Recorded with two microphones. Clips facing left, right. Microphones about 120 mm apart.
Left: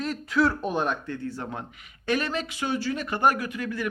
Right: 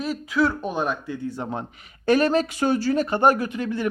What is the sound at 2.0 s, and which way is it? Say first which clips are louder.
Speech: right 8 dB; 35° right (ahead or behind).